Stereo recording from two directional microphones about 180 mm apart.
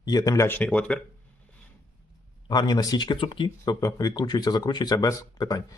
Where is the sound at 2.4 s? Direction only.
25° left (ahead or behind).